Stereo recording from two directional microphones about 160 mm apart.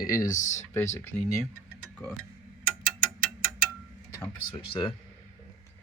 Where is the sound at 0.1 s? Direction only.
20° left (ahead or behind).